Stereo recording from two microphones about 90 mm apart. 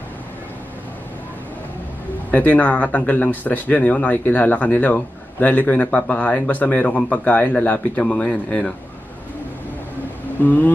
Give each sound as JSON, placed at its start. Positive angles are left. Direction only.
{"t": 2.3, "sound": "speech", "side_deg": 15}
{"t": 10.4, "sound": "speech", "side_deg": 20}